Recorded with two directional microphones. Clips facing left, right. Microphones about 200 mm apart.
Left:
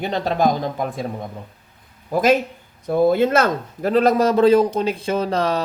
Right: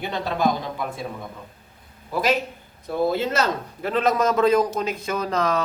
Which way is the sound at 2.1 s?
50° left (ahead or behind).